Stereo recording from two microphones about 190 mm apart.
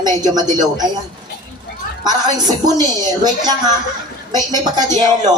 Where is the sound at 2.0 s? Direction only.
20° right (ahead or behind).